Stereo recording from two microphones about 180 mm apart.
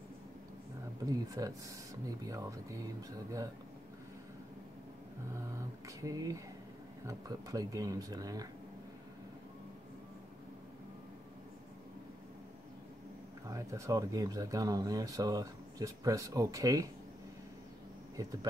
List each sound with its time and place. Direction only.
1.0 s speech: 20° right (ahead or behind)
5.9 s speech: 20° right (ahead or behind)
13.5 s speech: 15° right (ahead or behind)
18.1 s speech: 20° right (ahead or behind)